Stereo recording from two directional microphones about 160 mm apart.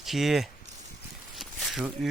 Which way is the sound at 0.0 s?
Centre (ahead or behind).